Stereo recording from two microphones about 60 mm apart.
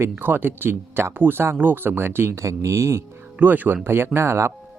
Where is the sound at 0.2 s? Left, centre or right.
Right.